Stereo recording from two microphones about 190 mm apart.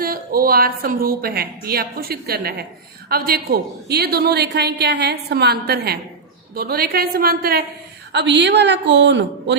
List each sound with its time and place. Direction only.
0.0 s a woman's voice: 50° right (ahead or behind)
8.1 s a woman's voice: 65° right (ahead or behind)